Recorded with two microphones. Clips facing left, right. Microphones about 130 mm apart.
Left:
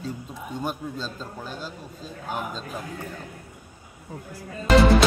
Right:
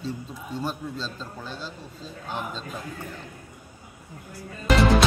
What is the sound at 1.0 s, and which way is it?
A man's voice, 10° left (ahead or behind).